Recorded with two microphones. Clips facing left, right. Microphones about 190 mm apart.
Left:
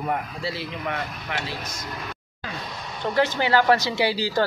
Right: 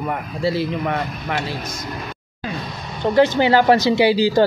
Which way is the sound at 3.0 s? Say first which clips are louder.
Right 8 dB; 20° right (ahead or behind).